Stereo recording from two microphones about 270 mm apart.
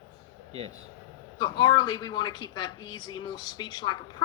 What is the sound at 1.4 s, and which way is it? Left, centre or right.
Speech, centre.